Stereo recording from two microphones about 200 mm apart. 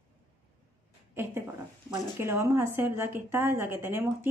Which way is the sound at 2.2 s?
15° right (ahead or behind).